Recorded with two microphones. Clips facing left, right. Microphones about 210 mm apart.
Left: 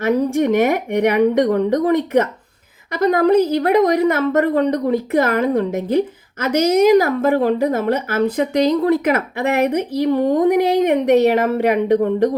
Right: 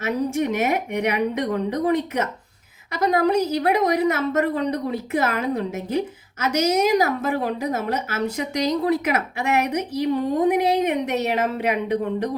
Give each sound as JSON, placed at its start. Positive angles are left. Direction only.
{"t": 0.0, "sound": "a woman's voice", "side_deg": 55}